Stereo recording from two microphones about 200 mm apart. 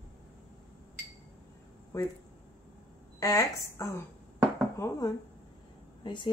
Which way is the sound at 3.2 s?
15° left (ahead or behind).